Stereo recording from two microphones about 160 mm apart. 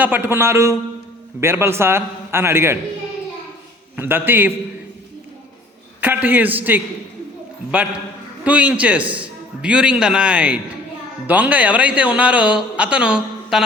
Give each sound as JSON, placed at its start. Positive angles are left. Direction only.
{"t": 0.0, "sound": "a woman's voice", "side_deg": -10}
{"t": 3.9, "sound": "a woman's voice", "side_deg": -15}
{"t": 6.0, "sound": "a woman's voice", "side_deg": -10}
{"t": 8.4, "sound": "a woman's voice", "side_deg": -10}